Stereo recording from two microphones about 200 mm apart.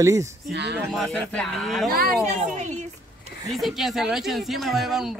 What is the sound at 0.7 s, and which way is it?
A man's voice, centre (ahead or behind).